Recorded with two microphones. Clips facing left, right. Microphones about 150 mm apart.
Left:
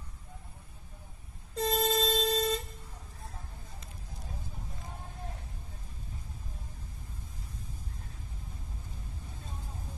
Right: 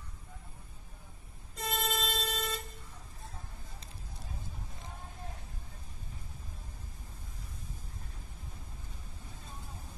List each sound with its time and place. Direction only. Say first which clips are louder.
1.5 s vehicle: left 7 dB; 35° left (ahead or behind)